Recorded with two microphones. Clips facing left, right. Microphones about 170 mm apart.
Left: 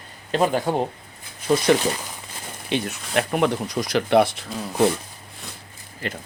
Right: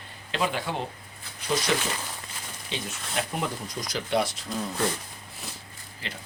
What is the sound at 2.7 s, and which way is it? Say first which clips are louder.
Speech: left 10 dB; 65° left (ahead or behind).